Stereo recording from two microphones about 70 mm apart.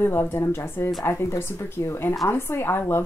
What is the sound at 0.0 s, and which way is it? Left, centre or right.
A woman's voice, left.